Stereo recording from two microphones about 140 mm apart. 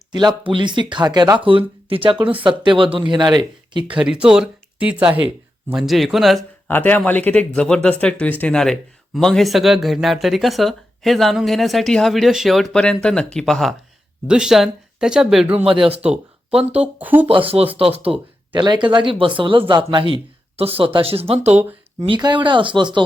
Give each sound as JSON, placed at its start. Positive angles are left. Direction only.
{"t": 0.1, "sound": "speech", "side_deg": -30}
{"t": 4.0, "sound": "speech", "side_deg": -5}
{"t": 6.7, "sound": "speech", "side_deg": 15}
{"t": 17.2, "sound": "speech", "side_deg": -45}
{"t": 21.5, "sound": "speech", "side_deg": -15}
{"t": 22.0, "sound": "speech", "side_deg": -35}